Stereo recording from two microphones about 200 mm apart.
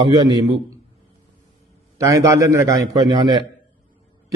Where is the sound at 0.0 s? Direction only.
20° right (ahead or behind).